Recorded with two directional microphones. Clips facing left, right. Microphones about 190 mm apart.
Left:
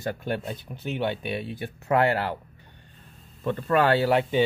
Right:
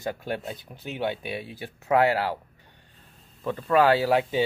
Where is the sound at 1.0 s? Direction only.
60° left (ahead or behind).